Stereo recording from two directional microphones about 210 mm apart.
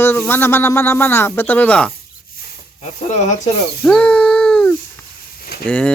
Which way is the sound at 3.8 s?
5° left (ahead or behind).